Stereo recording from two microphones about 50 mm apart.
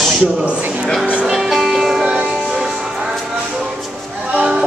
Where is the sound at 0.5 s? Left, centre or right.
Right.